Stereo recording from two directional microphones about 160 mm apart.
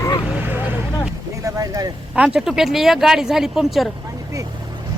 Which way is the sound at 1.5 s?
20° right (ahead or behind).